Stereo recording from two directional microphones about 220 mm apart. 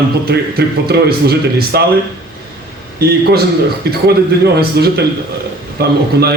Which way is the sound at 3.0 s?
45° right (ahead or behind).